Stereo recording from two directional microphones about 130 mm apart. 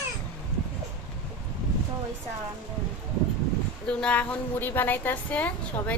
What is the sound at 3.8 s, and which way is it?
A woman's voice, 10° left (ahead or behind).